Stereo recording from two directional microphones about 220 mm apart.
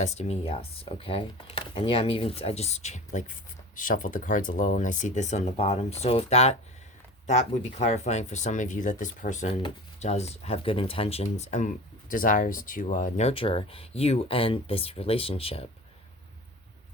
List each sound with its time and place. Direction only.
0.0 s speech: 30° left (ahead or behind)